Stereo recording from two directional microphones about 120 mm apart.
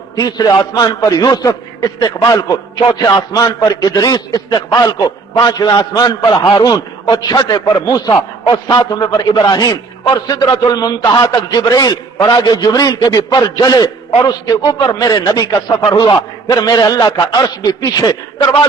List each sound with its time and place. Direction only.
0.2 s a man's voice: 30° left (ahead or behind)